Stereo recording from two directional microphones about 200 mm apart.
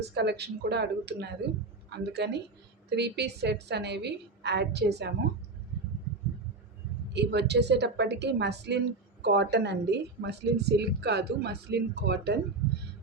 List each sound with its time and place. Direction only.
0.1 s a woman's voice: 55° right (ahead or behind)
7.1 s a woman's voice: 60° right (ahead or behind)